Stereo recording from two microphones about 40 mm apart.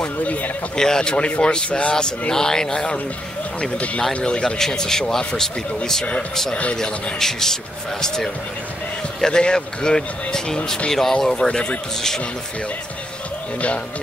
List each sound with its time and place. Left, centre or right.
0.0 s a man's voice: left
0.7 s speech: centre
1.1 s speech: left
2.0 s speech: centre
3.7 s a man's voice: left
4.4 s speech: centre
6.5 s speech: left
6.8 s speech: centre
9.2 s speech: centre
11.4 s speech: left